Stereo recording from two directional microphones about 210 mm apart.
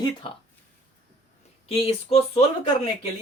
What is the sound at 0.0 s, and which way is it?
Speech, 25° left (ahead or behind).